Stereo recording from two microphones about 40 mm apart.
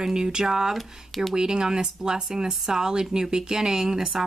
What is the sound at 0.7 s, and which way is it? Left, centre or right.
Speech, centre.